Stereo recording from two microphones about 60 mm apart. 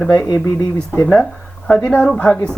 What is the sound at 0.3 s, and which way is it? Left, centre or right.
Speech, left.